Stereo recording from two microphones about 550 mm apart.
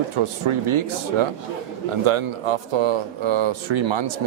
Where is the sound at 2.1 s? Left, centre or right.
Right.